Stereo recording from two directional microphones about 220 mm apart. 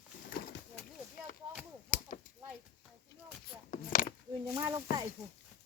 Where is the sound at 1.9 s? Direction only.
35° left (ahead or behind).